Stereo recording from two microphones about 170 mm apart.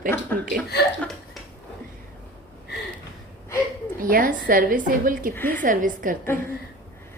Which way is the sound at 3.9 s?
55° right (ahead or behind).